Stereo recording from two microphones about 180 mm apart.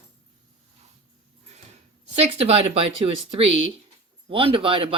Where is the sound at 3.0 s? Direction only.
30° right (ahead or behind).